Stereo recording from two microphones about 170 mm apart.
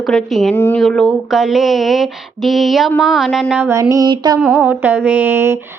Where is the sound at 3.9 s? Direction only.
25° right (ahead or behind).